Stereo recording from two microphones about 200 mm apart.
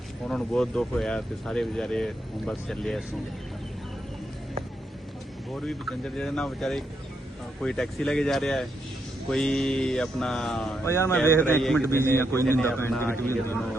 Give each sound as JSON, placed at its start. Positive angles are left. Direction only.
{"t": 0.3, "sound": "speech", "side_deg": 0}
{"t": 5.5, "sound": "speech", "side_deg": 0}
{"t": 10.8, "sound": "a man's voice", "side_deg": 15}